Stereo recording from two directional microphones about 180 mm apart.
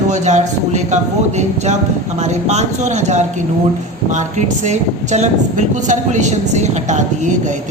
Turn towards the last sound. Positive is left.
turn(degrees=-40)  # may be behind; listen again after turning